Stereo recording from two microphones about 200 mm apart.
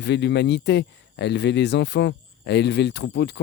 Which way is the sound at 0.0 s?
60° left (ahead or behind).